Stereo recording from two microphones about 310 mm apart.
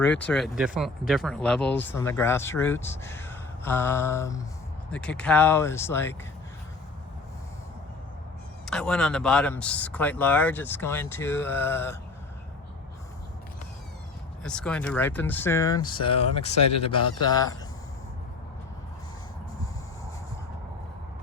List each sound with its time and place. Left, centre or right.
0.0 s speech: centre
8.6 s speech: centre
14.4 s speech: centre